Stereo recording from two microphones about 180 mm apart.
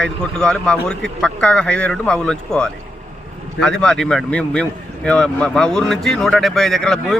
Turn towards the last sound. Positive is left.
turn(degrees=0)  # may be behind; listen again after turning